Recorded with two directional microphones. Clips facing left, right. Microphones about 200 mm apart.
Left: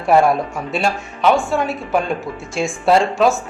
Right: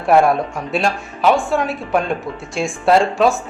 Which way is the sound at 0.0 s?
Centre (ahead or behind).